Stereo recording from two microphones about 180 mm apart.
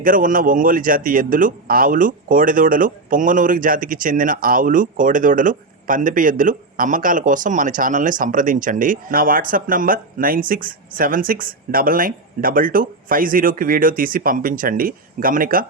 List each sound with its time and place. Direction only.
0.0 s a man's voice: 50° right (ahead or behind)